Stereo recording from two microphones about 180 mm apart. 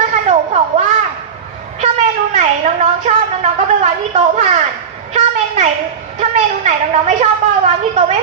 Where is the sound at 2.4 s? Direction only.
40° right (ahead or behind).